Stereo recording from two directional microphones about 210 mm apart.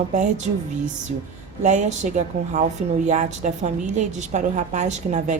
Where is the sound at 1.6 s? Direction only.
35° right (ahead or behind).